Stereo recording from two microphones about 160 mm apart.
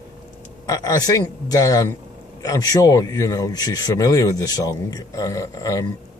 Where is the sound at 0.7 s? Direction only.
20° left (ahead or behind).